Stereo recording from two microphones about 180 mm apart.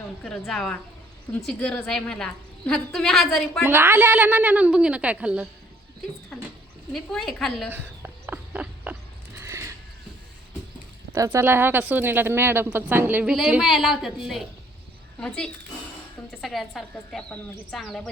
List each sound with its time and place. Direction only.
0.2 s a woman's voice: 5° left (ahead or behind)
3.6 s speech: 10° right (ahead or behind)
6.9 s a woman's voice: centre (ahead or behind)
7.7 s a sound: 10° right (ahead or behind)
9.4 s horse: 15° right (ahead or behind)
11.1 s speech: 15° right (ahead or behind)
16.4 s a woman's voice: centre (ahead or behind)